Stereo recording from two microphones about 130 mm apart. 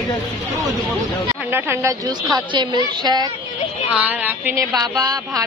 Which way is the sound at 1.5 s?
15° right (ahead or behind).